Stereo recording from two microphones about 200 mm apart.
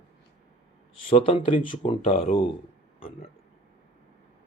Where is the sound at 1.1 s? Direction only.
25° left (ahead or behind).